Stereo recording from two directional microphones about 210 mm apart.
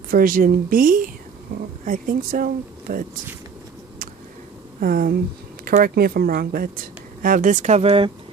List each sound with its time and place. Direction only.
0.1 s speech: 45° right (ahead or behind)
4.8 s speech: 40° right (ahead or behind); by 8.1 s 25° right (ahead or behind)